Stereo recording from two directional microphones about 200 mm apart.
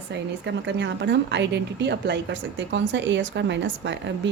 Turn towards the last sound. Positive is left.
turn(degrees=-60)  # may be behind; listen again after turning